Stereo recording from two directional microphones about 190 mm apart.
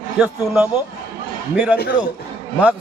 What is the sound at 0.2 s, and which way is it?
Speech, 10° right (ahead or behind).